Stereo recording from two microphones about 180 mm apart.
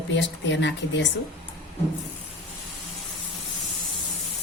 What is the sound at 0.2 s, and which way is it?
Speech, 80° left.